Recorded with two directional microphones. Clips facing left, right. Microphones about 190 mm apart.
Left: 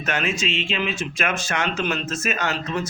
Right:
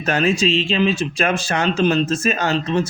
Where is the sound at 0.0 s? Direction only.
35° right (ahead or behind).